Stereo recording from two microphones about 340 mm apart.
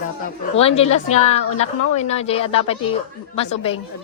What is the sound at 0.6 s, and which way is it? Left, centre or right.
A woman's voice, centre.